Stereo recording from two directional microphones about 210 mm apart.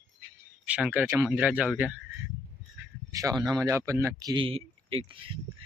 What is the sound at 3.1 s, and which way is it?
Speech, 15° right (ahead or behind).